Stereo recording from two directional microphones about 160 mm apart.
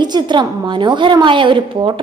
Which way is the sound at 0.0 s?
30° right (ahead or behind).